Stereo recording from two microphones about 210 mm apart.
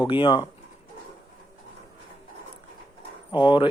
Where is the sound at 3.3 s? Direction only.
20° left (ahead or behind).